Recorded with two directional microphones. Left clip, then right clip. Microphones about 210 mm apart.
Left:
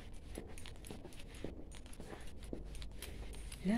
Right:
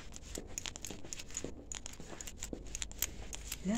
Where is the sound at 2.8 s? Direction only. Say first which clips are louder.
Right 10 dB; 55° right (ahead or behind).